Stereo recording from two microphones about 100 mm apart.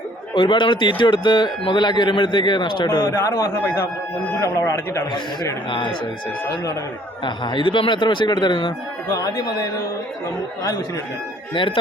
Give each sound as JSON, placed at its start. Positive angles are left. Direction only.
{"t": 0.3, "sound": "a man's voice", "side_deg": 55}
{"t": 3.0, "sound": "a man's voice", "side_deg": 30}
{"t": 4.4, "sound": "speech", "side_deg": 35}
{"t": 7.3, "sound": "a man's voice", "side_deg": 50}
{"t": 9.0, "sound": "speech", "side_deg": 40}
{"t": 11.5, "sound": "speech", "side_deg": 55}